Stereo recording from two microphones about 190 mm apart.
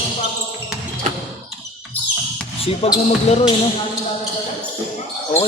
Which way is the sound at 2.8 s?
30° left (ahead or behind).